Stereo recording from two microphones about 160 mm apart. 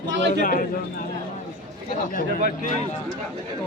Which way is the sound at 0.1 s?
90° right.